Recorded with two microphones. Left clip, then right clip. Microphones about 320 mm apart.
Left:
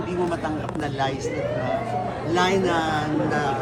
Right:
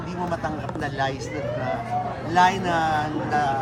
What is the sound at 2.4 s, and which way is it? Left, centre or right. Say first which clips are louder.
Speech: right 2 dB; right.